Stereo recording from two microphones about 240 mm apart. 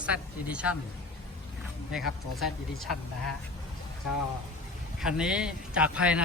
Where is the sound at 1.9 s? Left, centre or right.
Centre.